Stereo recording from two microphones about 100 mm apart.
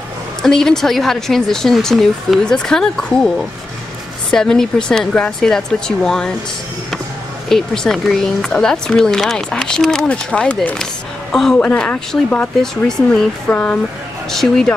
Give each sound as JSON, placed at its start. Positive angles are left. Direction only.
{"t": 0.4, "sound": "speech", "side_deg": 5}
{"t": 4.3, "sound": "speech", "side_deg": 5}
{"t": 7.4, "sound": "speech", "side_deg": 5}
{"t": 14.3, "sound": "speech", "side_deg": 5}